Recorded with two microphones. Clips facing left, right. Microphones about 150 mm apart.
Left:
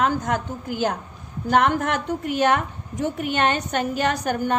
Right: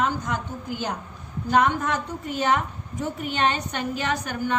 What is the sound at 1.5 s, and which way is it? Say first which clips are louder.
A woman's voice: left 2 dB; 70° left (ahead or behind).